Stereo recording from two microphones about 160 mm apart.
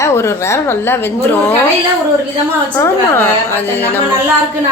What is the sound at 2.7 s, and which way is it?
A woman's voice, 15° left (ahead or behind).